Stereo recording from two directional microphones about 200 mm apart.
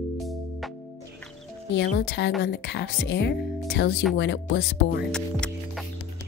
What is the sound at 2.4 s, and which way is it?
Speech, 55° left (ahead or behind).